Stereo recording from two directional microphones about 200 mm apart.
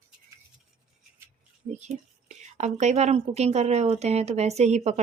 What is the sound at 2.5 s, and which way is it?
Speech, 35° right (ahead or behind).